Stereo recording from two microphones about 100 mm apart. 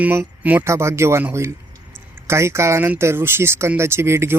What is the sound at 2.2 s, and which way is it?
Speech, 30° right (ahead or behind).